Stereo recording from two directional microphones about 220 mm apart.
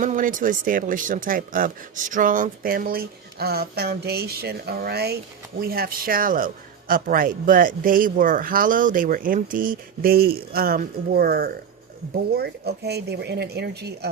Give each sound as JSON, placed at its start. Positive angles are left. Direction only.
{"t": 0.0, "sound": "a man's voice", "side_deg": -35}